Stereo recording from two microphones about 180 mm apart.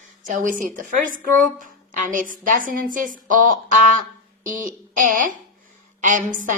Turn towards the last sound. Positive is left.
turn(degrees=-45)  # may be behind; listen again after turning